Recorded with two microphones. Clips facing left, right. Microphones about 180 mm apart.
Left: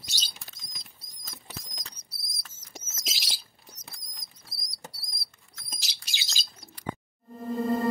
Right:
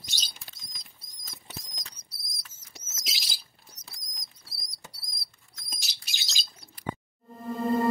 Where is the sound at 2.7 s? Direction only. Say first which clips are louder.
Left 4 dB; 50° left (ahead or behind).